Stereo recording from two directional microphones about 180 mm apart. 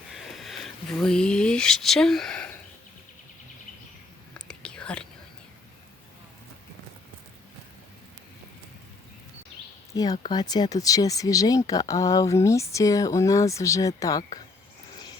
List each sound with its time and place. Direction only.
0.1 s a sound: centre (ahead or behind)
4.4 s whispering: 5° left (ahead or behind)
9.9 s speech: 20° left (ahead or behind)